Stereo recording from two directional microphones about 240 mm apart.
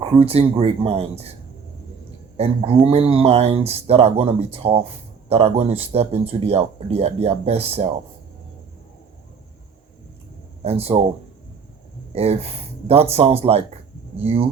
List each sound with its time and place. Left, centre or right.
0.0 s speech: right
2.4 s speech: right
10.6 s speech: right
12.1 s speech: right